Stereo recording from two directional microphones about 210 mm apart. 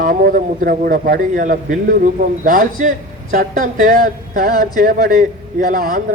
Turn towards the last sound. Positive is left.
turn(degrees=-40)  # may be behind; listen again after turning